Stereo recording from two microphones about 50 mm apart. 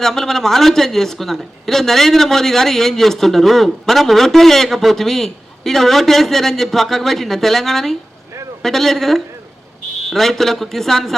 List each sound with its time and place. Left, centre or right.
0.0 s a man's voice: centre